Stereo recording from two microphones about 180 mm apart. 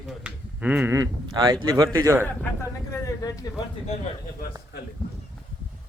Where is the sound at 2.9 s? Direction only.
20° left (ahead or behind).